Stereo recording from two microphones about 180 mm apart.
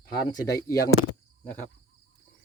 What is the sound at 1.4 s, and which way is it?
Cricket, 10° left (ahead or behind).